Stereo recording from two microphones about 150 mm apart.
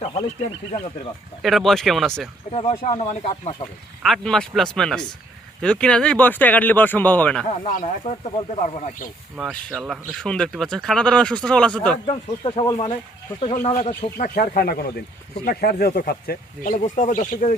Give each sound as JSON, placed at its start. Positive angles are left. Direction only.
{"t": 1.4, "sound": "speech", "side_deg": 0}
{"t": 2.5, "sound": "speech", "side_deg": 40}
{"t": 4.0, "sound": "speech", "side_deg": 0}
{"t": 7.4, "sound": "speech", "side_deg": 50}
{"t": 9.4, "sound": "speech", "side_deg": 5}
{"t": 9.7, "sound": "speech", "side_deg": -5}
{"t": 10.2, "sound": "speech", "side_deg": 5}
{"t": 12.0, "sound": "speech", "side_deg": 40}
{"t": 12.6, "sound": "speech", "side_deg": 25}
{"t": 13.4, "sound": "speech", "side_deg": 50}